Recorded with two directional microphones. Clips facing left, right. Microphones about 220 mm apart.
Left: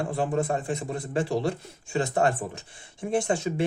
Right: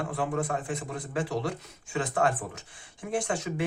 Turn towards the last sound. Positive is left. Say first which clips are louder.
# left 4 dB
turn(degrees=25)  # may be behind; listen again after turning